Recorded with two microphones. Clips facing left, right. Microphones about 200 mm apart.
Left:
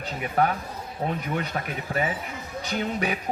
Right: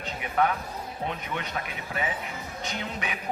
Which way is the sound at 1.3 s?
35° left (ahead or behind).